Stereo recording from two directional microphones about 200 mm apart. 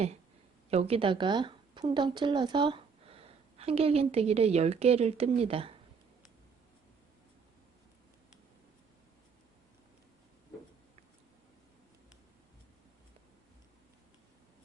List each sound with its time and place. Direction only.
0.7 s speech: 30° right (ahead or behind)